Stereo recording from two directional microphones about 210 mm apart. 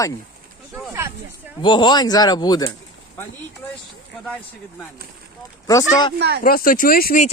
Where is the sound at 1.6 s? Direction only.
20° left (ahead or behind).